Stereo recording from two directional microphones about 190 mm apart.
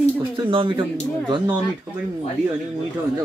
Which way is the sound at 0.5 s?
25° right (ahead or behind).